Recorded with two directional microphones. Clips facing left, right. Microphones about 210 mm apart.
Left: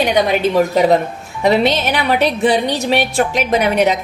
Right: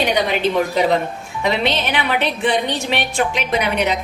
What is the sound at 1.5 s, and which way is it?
A woman's voice, 45° left (ahead or behind).